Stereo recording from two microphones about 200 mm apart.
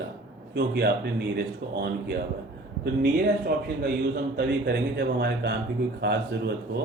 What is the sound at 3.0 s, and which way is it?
A man's voice, 50° right (ahead or behind).